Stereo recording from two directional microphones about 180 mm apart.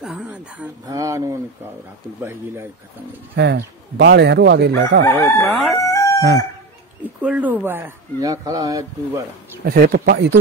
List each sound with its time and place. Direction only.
0.0 s speech: 5° right (ahead or behind)
0.8 s speech: 20° right (ahead or behind)
3.3 s speech: 70° right (ahead or behind)
5.0 s chicken: 10° left (ahead or behind)
7.2 s speech: 10° right (ahead or behind)
9.7 s speech: 60° right (ahead or behind)